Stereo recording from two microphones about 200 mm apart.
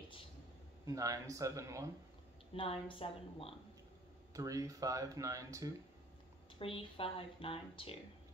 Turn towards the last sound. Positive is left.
turn(degrees=25)  # may be behind; listen again after turning